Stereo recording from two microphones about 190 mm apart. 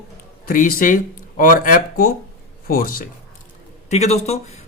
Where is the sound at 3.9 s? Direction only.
35° left (ahead or behind).